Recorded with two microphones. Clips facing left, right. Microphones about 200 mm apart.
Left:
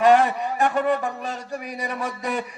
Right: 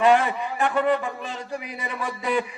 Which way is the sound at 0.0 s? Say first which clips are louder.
Left 2 dB; 45° left (ahead or behind).